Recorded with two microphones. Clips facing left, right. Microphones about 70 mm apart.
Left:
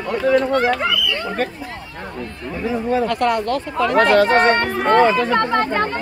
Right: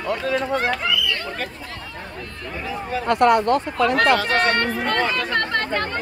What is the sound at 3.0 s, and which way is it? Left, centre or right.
Speech, right.